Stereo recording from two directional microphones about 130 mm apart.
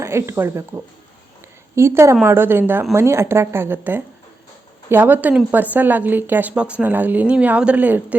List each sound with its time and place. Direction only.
0.0 s a woman's voice: 20° right (ahead or behind)